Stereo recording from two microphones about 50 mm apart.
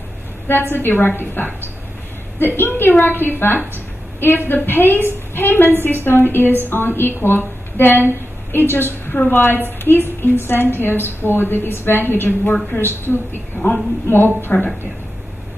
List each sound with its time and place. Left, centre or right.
0.5 s a woman's voice: left